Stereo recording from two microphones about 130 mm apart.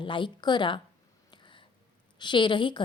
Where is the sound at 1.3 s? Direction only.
40° left (ahead or behind).